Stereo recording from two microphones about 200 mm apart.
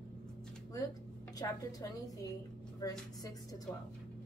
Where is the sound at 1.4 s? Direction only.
20° left (ahead or behind).